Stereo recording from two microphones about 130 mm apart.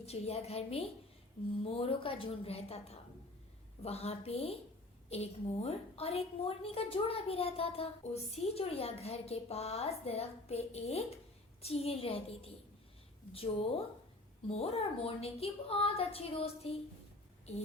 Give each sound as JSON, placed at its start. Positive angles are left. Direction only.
{"t": 0.0, "sound": "a woman's voice", "side_deg": 55}